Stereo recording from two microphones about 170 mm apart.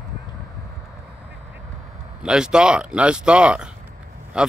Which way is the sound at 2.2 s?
5° right (ahead or behind).